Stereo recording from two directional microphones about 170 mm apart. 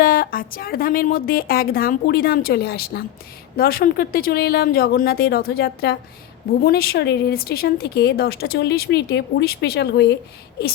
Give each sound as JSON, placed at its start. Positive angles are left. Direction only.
{"t": 0.0, "sound": "a woman's voice", "side_deg": 60}